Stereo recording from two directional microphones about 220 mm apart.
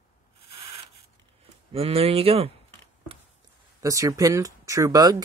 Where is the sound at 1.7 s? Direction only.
25° right (ahead or behind).